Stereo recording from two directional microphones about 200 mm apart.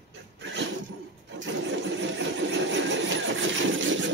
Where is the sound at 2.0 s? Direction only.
65° right (ahead or behind).